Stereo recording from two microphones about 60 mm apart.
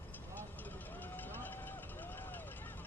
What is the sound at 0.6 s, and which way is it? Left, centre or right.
Vehicle, left.